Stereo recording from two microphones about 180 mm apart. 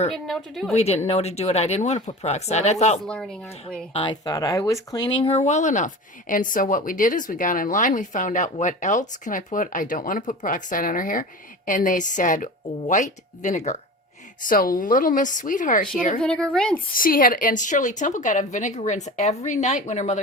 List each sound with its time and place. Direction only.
0.3 s speech: centre (ahead or behind)
0.7 s speech: 35° left (ahead or behind)
3.1 s speech: 5° left (ahead or behind)
3.9 s speech: 25° left (ahead or behind)
14.4 s speech: 50° left (ahead or behind)
16.2 s speech: 5° left (ahead or behind)
16.9 s speech: 50° left (ahead or behind)